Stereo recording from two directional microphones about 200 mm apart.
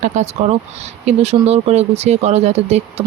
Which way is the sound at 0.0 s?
35° right (ahead or behind).